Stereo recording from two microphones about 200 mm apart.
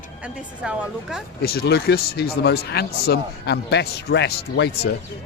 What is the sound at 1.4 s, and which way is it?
Speech, 50° left (ahead or behind).